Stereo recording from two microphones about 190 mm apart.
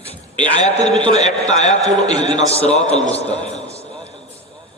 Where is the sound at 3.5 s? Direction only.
35° left (ahead or behind).